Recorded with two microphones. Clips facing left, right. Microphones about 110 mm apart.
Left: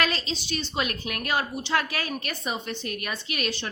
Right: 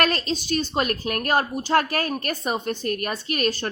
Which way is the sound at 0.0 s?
50° right (ahead or behind).